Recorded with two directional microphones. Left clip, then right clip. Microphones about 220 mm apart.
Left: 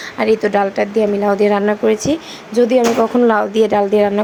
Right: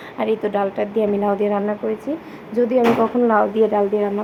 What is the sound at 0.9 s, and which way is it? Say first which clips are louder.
Speech: left 3 dB; 20° left (ahead or behind).